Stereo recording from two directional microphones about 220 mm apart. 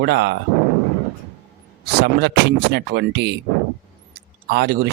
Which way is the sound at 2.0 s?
50° right (ahead or behind).